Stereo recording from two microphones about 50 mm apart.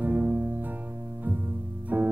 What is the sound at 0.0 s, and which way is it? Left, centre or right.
Music, right.